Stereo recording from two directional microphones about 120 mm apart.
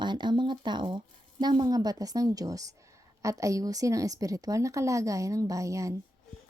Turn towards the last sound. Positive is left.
turn(degrees=-25)  # may be behind; listen again after turning